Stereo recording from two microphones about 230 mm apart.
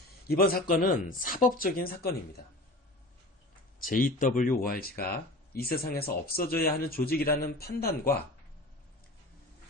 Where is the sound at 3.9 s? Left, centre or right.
Left.